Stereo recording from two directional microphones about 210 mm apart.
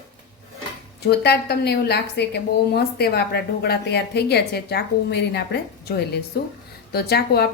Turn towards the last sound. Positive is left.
turn(degrees=50)  # may be behind; listen again after turning